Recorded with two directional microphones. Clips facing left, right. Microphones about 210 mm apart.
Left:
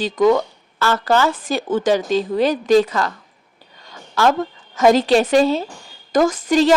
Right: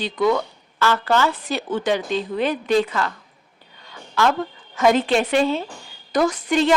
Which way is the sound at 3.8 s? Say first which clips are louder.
Left 3 dB; 40° left (ahead or behind).